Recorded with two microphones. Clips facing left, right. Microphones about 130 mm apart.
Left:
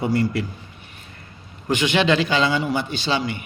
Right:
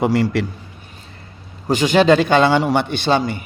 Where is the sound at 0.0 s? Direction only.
90° right.